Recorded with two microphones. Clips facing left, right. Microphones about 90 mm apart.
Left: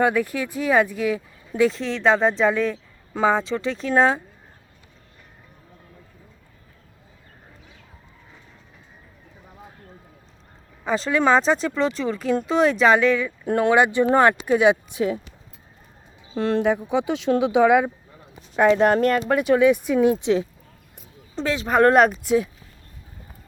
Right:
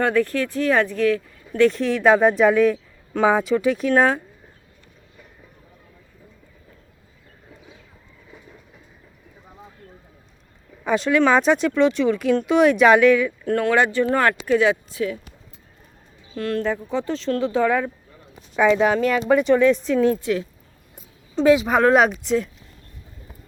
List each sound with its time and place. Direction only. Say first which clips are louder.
0.0 s speech: right 1 dB; 10° left (ahead or behind)
1.7 s speech: right 3 dB; 5° right (ahead or behind)
10.8 s speech: right 2 dB; centre (ahead or behind)
13.4 s speech: left 1 dB; 20° left (ahead or behind)
16.3 s speech: left 3 dB; 25° left (ahead or behind)
18.6 s speech: left 1 dB; centre (ahead or behind)
18.9 s speech: left 1 dB; 45° left (ahead or behind)
19.3 s speech: right 3 dB; 5° left (ahead or behind); by 20.5 s 20° left (ahead or behind)
21.4 s speech: right 2 dB; 5° right (ahead or behind)